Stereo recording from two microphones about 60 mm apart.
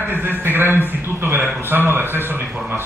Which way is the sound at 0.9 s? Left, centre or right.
Right.